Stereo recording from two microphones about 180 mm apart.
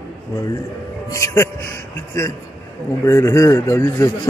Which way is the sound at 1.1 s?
15° left (ahead or behind).